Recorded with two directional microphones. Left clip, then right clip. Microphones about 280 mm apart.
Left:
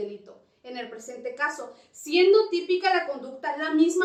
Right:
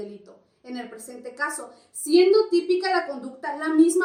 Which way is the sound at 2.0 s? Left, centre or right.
Right.